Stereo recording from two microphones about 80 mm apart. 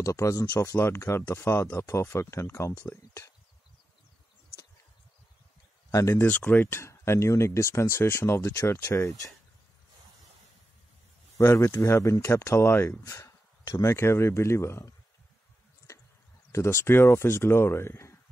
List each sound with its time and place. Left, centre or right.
0.0 s speech: left
5.9 s speech: left
6.2 s speech: left
11.3 s speech: left
13.0 s a sound: left
13.9 s speech: left
16.5 s speech: left